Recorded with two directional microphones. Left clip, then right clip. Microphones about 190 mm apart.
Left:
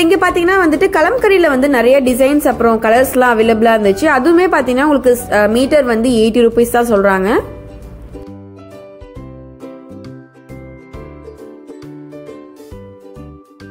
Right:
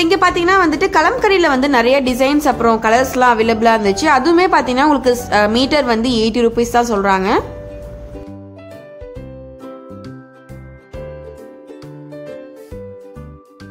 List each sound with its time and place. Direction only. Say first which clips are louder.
0.0 s a woman's voice: left 2 dB; 15° left (ahead or behind)